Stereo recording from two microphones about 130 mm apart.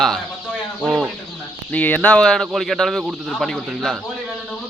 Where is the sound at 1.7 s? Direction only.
10° left (ahead or behind).